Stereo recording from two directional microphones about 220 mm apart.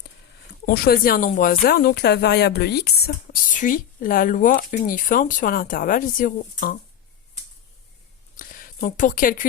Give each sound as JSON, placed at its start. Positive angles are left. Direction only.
{"t": 0.6, "sound": "speech", "side_deg": 40}
{"t": 8.4, "sound": "speech", "side_deg": 40}